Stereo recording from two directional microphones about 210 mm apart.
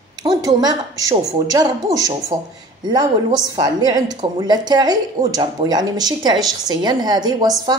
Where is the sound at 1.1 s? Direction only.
20° right (ahead or behind).